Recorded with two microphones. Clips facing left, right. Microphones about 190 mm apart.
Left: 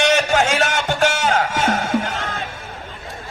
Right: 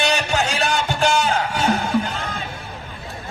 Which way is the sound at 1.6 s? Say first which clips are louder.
Even; 75° left (ahead or behind).